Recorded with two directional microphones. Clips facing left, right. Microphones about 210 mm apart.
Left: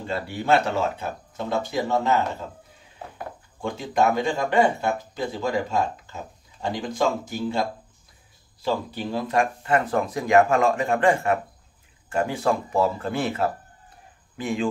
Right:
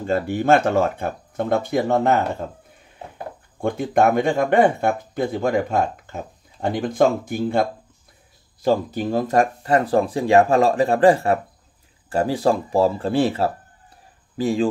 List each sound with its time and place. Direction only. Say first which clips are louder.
0.0 s speech: right 8 dB; 45° right (ahead or behind)
3.6 s speech: right 4 dB; 55° right (ahead or behind)
8.6 s speech: right 6 dB; 45° right (ahead or behind)